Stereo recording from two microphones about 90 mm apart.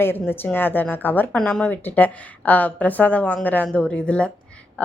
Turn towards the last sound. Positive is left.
turn(degrees=10)  # may be behind; listen again after turning